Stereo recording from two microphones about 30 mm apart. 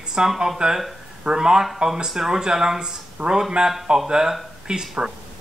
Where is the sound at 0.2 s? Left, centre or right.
Right.